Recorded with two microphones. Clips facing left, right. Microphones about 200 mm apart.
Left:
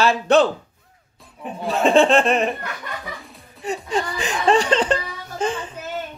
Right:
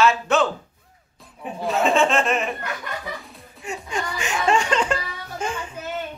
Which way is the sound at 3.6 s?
35° left (ahead or behind).